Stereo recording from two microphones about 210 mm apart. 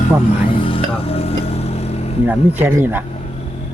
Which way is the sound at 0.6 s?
25° left (ahead or behind).